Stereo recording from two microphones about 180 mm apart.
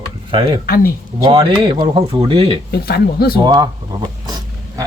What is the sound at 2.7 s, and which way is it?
Speech, 60° left (ahead or behind).